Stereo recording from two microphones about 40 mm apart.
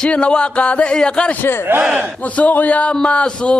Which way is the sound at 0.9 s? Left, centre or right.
Left.